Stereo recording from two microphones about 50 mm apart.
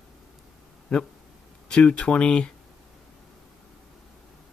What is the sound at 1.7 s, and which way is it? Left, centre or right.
Speech, left.